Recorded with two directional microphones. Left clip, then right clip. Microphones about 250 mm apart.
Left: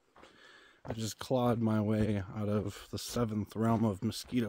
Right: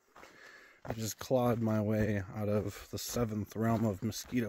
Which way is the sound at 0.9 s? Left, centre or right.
Centre.